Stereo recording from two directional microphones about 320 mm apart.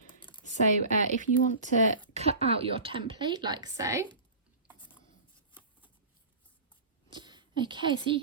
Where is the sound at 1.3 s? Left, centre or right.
Left.